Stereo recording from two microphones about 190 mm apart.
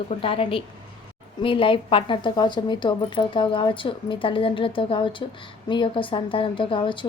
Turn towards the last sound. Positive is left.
turn(degrees=25)  # may be behind; listen again after turning